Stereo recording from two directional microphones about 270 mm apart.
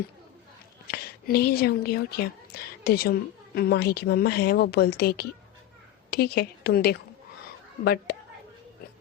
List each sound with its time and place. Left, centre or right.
0.9 s a woman's voice: left